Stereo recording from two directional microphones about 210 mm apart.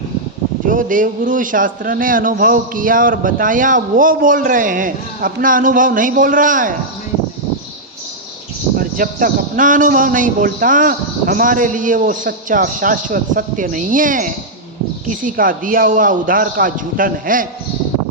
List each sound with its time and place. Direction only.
0.7 s a man's voice: 40° right (ahead or behind)
8.8 s a man's voice: 40° right (ahead or behind)